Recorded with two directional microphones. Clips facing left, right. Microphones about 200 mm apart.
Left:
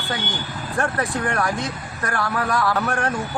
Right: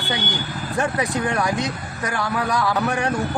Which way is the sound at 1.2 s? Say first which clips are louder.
Right 1 dB; centre (ahead or behind).